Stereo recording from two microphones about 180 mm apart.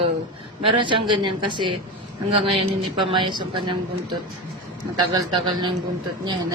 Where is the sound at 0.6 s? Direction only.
25° right (ahead or behind).